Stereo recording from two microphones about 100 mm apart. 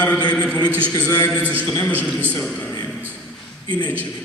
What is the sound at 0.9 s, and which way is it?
Speech, 35° left (ahead or behind).